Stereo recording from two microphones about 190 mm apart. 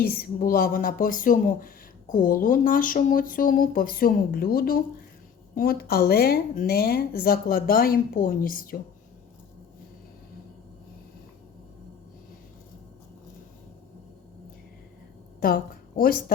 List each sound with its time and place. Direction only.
0.1 s speech: 50° left (ahead or behind)
15.4 s a woman's voice: 50° left (ahead or behind)